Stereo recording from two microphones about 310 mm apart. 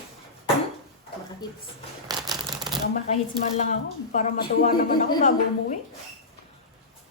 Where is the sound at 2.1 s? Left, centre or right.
Centre.